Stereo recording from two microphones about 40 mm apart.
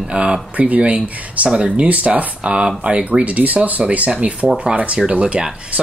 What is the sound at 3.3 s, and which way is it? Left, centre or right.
Speech, right.